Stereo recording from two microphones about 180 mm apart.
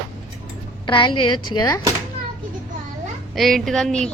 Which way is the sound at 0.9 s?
30° left (ahead or behind).